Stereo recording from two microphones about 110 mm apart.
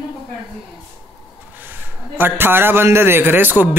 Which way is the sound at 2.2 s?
20° right (ahead or behind).